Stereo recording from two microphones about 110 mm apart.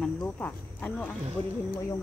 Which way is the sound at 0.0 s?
15° left (ahead or behind).